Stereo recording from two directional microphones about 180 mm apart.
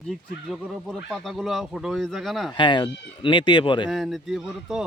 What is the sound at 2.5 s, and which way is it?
Speech, 25° left (ahead or behind).